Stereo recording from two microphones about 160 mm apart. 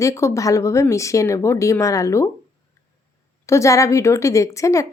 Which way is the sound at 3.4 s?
20° left (ahead or behind).